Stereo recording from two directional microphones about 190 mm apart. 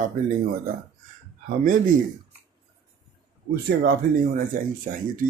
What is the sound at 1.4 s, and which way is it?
Speech, 45° right (ahead or behind).